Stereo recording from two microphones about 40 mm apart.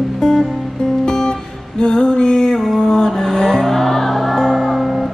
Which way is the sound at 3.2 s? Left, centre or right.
Centre.